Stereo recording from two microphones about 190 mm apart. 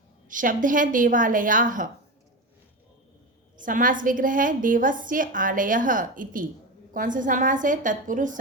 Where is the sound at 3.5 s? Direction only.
45° right (ahead or behind).